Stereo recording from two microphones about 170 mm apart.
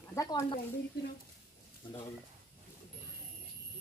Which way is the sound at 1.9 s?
25° left (ahead or behind).